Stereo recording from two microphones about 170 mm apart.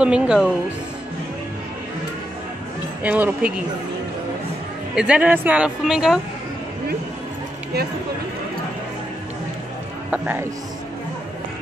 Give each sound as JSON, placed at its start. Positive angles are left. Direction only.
{"t": 0.0, "sound": "speech", "side_deg": -5}
{"t": 3.0, "sound": "a woman's voice", "side_deg": -10}
{"t": 4.9, "sound": "a woman's voice", "side_deg": -5}
{"t": 10.1, "sound": "a woman's voice", "side_deg": -10}